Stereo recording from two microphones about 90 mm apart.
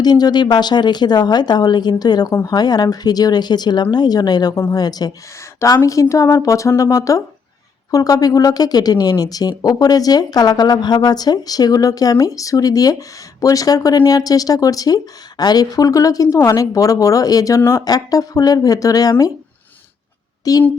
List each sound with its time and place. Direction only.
0.0 s speech: 50° left (ahead or behind)
17.6 s speech: 30° left (ahead or behind)
17.8 s speech: 45° left (ahead or behind)
20.4 s a woman's voice: 40° left (ahead or behind)